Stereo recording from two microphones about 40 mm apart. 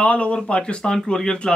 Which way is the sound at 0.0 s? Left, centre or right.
Left.